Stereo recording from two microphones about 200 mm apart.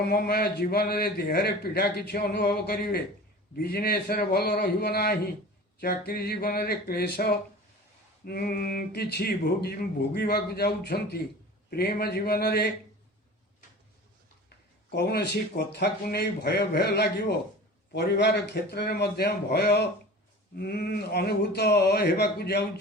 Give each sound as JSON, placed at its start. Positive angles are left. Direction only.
{"t": 0.0, "sound": "a man's voice", "side_deg": 50}
{"t": 14.8, "sound": "a man's voice", "side_deg": 55}